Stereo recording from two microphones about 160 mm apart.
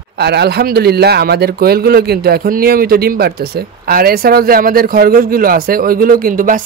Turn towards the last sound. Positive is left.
turn(degrees=-60)  # may be behind; listen again after turning